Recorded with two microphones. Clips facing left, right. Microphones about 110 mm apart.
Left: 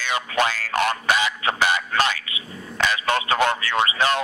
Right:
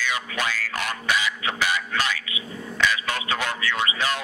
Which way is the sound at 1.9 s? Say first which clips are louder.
Left 4 dB; 60° left (ahead or behind).